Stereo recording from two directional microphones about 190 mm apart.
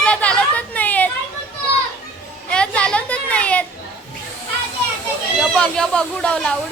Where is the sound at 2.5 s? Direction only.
5° left (ahead or behind).